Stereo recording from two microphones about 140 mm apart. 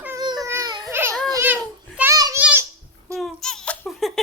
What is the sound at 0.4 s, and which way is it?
Baby cry, 20° right (ahead or behind).